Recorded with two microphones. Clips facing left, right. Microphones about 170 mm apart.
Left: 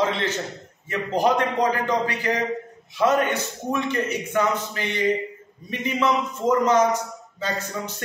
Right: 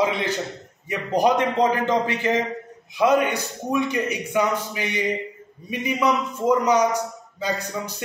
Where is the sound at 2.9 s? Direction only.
15° right (ahead or behind).